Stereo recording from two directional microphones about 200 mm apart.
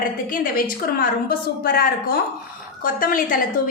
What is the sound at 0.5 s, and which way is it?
A woman's voice, 45° left (ahead or behind).